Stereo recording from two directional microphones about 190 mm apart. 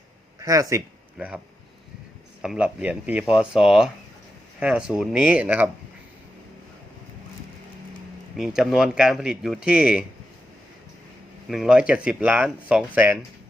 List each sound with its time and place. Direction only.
0.3 s speech: 15° right (ahead or behind)
2.4 s speech: 5° right (ahead or behind)
8.4 s speech: 5° right (ahead or behind)
11.4 s speech: centre (ahead or behind)